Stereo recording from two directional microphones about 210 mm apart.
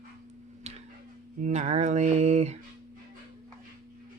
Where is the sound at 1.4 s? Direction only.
30° right (ahead or behind).